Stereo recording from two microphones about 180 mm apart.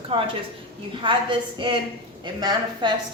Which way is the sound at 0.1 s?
30° right (ahead or behind).